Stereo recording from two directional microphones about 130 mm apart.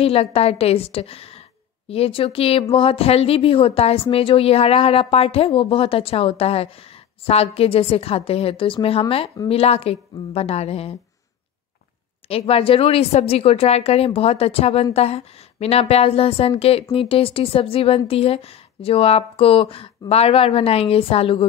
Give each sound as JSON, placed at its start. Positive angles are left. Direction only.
{"t": 0.0, "sound": "a woman's voice", "side_deg": 50}
{"t": 12.3, "sound": "a woman's voice", "side_deg": 50}